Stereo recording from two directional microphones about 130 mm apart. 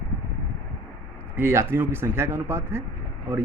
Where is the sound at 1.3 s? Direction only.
20° right (ahead or behind).